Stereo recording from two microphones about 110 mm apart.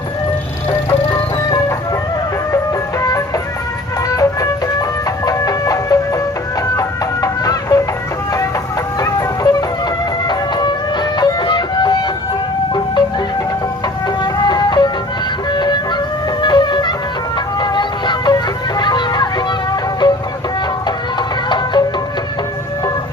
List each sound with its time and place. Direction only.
3.1 s music: 30° left (ahead or behind)
9.0 s music: 35° left (ahead or behind)
14.2 s music: 40° left (ahead or behind)
15.5 s vehicle: 40° left (ahead or behind)
16.4 s music: 45° left (ahead or behind)
21.2 s music: 45° left (ahead or behind)